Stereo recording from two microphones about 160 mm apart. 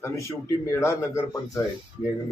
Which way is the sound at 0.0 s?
15° left (ahead or behind).